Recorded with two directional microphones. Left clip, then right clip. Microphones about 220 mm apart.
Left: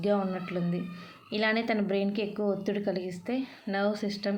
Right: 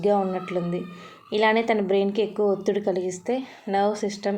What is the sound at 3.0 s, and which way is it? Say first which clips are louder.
Speech: right 8 dB; 60° right (ahead or behind).